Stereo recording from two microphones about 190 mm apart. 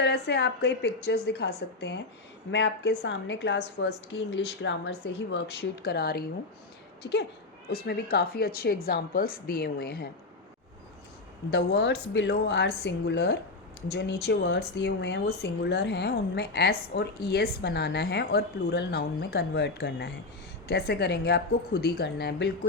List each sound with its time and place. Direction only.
0.0 s a woman's voice: 60° left (ahead or behind)
11.5 s speech: 60° left (ahead or behind)